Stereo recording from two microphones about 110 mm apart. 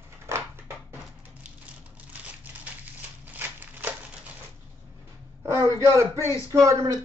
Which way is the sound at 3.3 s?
15° right (ahead or behind).